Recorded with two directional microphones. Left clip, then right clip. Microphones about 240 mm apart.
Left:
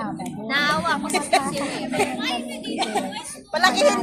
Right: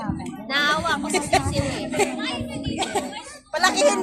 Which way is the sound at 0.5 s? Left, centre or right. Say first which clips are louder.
Even; centre.